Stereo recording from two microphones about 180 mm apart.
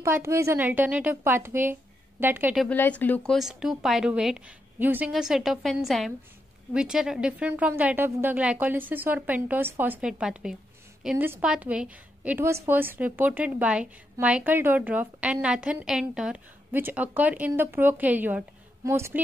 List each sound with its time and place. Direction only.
0.0 s a woman's voice: 15° right (ahead or behind)
2.7 s speech: 10° left (ahead or behind)
3.3 s a woman's voice: 5° right (ahead or behind)